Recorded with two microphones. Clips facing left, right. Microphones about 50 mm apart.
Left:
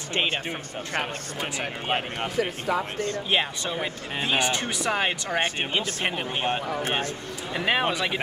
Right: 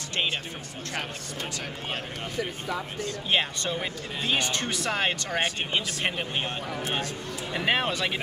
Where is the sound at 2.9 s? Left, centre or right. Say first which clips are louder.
Left 5 dB; left.